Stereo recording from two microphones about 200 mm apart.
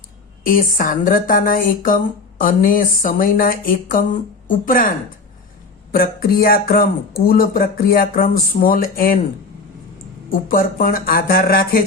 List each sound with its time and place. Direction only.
0.4 s speech: 45° left (ahead or behind)
5.9 s speech: 50° left (ahead or behind)
10.2 s speech: 45° left (ahead or behind)